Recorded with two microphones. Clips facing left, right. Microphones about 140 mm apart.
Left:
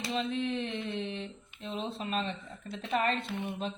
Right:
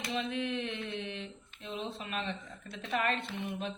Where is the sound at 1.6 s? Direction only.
35° left (ahead or behind).